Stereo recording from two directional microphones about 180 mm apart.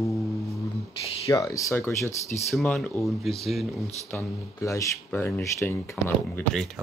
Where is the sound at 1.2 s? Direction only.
20° left (ahead or behind).